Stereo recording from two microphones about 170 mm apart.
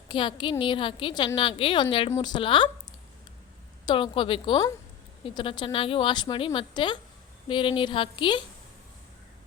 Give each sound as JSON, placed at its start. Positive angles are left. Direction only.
{"t": 0.1, "sound": "a woman's voice", "side_deg": 30}
{"t": 3.8, "sound": "a woman's voice", "side_deg": 30}